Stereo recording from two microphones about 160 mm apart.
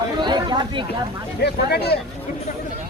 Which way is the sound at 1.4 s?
90° left.